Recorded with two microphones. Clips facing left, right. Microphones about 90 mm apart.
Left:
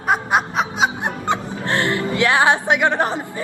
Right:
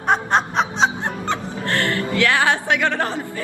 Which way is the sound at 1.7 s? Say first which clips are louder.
Left 2 dB; 20° left (ahead or behind).